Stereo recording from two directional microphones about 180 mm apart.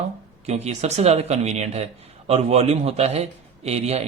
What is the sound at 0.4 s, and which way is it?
Speech, 40° right (ahead or behind).